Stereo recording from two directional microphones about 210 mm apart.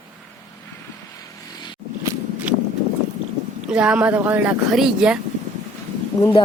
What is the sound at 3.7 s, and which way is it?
Speech, 5° right (ahead or behind).